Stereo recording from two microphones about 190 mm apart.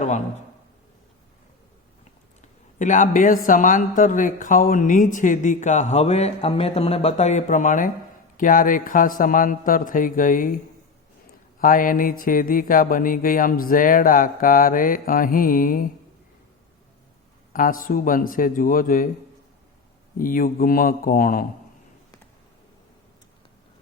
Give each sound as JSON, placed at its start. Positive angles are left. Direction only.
{"t": 2.7, "sound": "a man's voice", "side_deg": 40}
{"t": 11.6, "sound": "a man's voice", "side_deg": 45}
{"t": 17.5, "sound": "a man's voice", "side_deg": 45}
{"t": 20.1, "sound": "a man's voice", "side_deg": 45}